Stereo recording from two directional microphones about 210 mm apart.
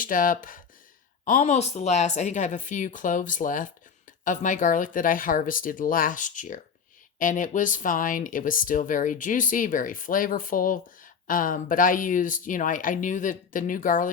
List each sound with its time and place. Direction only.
0.0 s speech: 40° left (ahead or behind)